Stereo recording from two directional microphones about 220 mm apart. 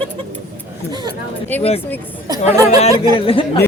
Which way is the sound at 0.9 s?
20° right (ahead or behind).